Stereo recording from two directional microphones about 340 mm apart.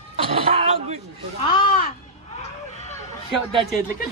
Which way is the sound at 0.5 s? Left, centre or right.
Right.